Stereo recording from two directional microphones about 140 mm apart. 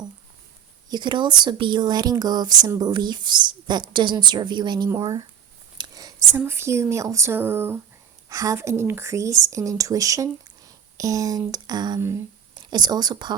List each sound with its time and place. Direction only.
0.9 s a woman's voice: 30° right (ahead or behind)
5.7 s whispering: 30° right (ahead or behind)
6.3 s a woman's voice: 15° right (ahead or behind)
11.9 s speech: 20° right (ahead or behind)
12.5 s speech: 30° right (ahead or behind)